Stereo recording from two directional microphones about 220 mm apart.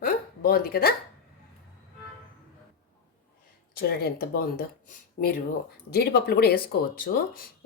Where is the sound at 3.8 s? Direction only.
45° left (ahead or behind).